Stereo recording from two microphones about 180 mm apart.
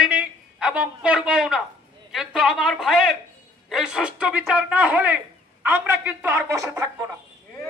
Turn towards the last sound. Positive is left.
turn(degrees=-15)  # may be behind; listen again after turning